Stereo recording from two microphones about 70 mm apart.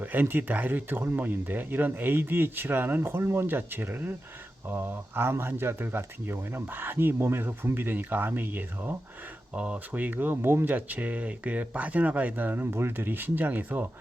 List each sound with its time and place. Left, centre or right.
0.0 s speech: right
9.6 s speech: centre